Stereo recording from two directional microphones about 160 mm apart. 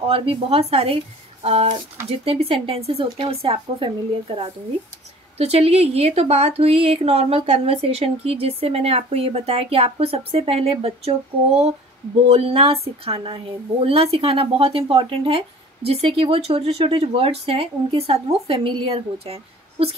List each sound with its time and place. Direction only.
0.0 s a woman's voice: 35° right (ahead or behind)
5.4 s a woman's voice: 40° right (ahead or behind)